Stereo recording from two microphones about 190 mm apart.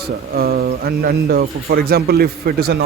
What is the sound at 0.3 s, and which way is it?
A man's voice, 55° right (ahead or behind).